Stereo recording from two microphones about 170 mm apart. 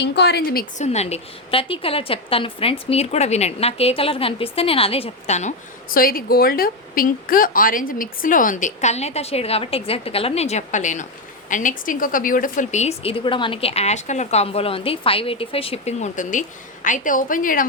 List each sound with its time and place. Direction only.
0.0 s a woman's voice: 85° left; by 0.7 s 65° left (ahead or behind)
0.8 s a woman's voice: 40° left (ahead or behind)